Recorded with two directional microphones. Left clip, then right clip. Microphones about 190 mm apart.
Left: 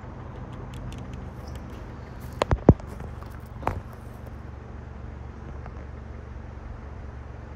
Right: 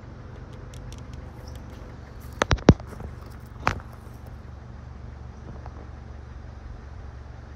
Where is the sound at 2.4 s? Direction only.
40° left (ahead or behind).